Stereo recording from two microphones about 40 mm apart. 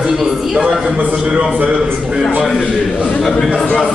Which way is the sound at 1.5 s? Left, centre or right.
Right.